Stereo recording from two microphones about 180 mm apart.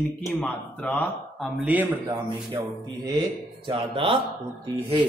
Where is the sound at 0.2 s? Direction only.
Centre (ahead or behind).